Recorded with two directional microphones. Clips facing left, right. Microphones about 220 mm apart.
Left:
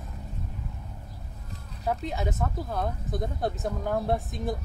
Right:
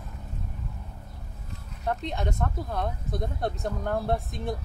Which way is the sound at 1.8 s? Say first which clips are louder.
Even; 5° left (ahead or behind).